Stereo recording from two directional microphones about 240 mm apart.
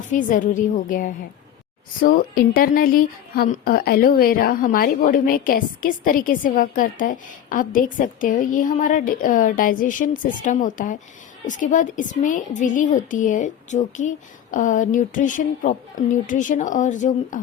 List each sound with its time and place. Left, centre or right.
0.1 s a woman's voice: left